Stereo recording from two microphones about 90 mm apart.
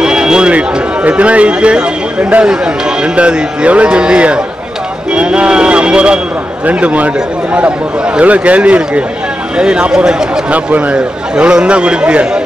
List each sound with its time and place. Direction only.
0.0 s speech: 10° right (ahead or behind)
8.2 s speech: 15° right (ahead or behind)